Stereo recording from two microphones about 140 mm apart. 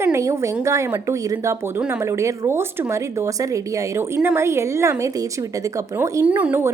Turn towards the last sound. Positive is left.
turn(degrees=-15)  # may be behind; listen again after turning